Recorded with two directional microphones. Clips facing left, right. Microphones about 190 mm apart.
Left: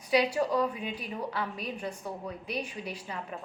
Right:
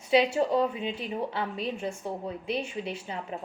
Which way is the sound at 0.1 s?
25° right (ahead or behind).